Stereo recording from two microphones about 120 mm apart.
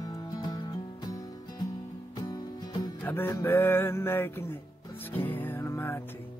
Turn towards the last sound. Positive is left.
turn(degrees=20)  # may be behind; listen again after turning